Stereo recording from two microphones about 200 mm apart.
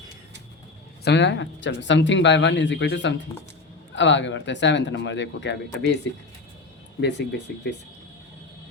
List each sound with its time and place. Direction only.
1.0 s speech: 65° left (ahead or behind)
7.0 s speech: 60° left (ahead or behind)